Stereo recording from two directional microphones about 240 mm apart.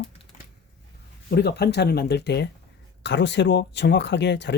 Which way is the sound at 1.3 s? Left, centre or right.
Left.